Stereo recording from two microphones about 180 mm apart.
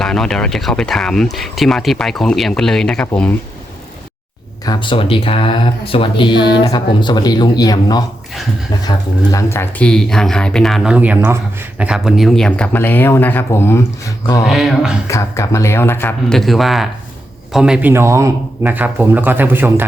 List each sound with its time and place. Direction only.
0.0 s speech: 5° left (ahead or behind)
4.6 s speech: 25° left (ahead or behind)
14.4 s speech: 5° right (ahead or behind)
15.0 s speech: 15° left (ahead or behind); by 19.8 s 10° right (ahead or behind)